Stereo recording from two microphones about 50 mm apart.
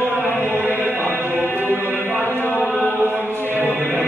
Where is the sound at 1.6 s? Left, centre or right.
Left.